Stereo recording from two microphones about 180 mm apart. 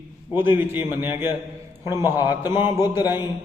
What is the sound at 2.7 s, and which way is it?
Speech, 20° left (ahead or behind).